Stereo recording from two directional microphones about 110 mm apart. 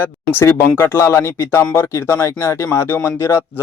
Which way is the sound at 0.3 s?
20° left (ahead or behind).